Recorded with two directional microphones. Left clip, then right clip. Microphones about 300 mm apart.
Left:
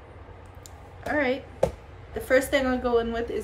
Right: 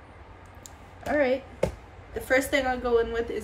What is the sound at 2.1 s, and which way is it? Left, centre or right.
A woman's voice, centre.